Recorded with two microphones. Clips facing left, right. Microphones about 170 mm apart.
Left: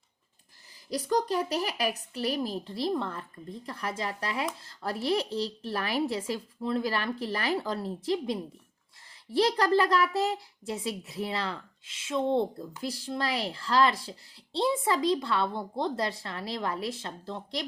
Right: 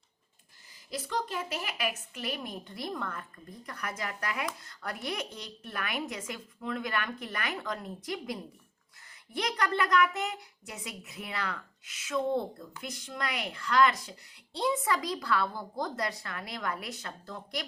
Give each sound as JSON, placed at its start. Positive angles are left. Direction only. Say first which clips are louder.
{"t": 0.9, "sound": "a woman's voice", "louder": "left 7 dB", "side_deg": 40}